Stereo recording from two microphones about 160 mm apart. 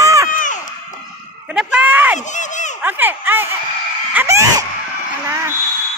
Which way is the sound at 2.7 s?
10° right (ahead or behind).